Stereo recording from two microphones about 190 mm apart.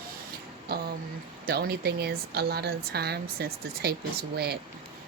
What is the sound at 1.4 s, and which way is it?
Speech, 55° right (ahead or behind).